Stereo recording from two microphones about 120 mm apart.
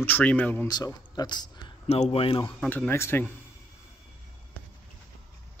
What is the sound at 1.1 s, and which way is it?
Speech, 35° left (ahead or behind).